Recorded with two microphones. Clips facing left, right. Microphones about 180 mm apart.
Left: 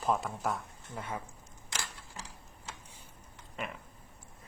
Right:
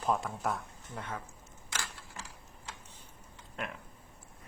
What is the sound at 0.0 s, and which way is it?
Speech, centre (ahead or behind).